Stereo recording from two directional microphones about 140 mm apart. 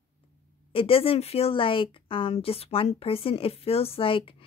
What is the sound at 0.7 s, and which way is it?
Speech, 40° left (ahead or behind).